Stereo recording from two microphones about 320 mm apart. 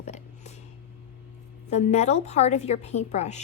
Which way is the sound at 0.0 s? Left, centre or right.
Left.